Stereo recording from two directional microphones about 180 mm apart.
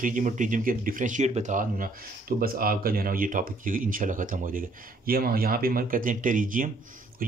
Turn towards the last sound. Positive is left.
turn(degrees=-50)  # may be behind; listen again after turning